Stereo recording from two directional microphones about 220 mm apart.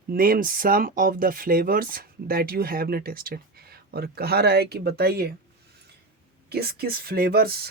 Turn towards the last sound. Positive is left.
turn(degrees=-45)  # may be behind; listen again after turning